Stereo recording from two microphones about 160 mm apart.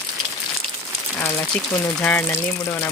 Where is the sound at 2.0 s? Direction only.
10° left (ahead or behind).